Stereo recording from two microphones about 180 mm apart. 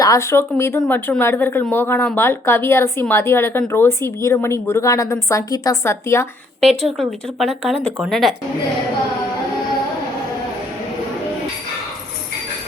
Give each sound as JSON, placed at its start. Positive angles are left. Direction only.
{"t": 0.0, "sound": "speech", "side_deg": 15}
{"t": 7.0, "sound": "speech", "side_deg": 0}